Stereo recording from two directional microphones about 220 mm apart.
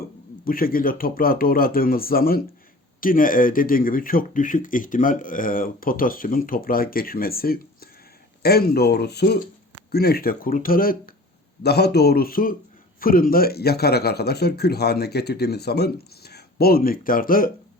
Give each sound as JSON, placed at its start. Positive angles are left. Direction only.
{"t": 0.4, "sound": "speech", "side_deg": 40}